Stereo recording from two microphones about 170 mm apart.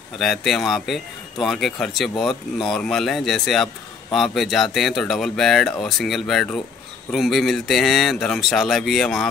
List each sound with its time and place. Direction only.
0.2 s a man's voice: centre (ahead or behind)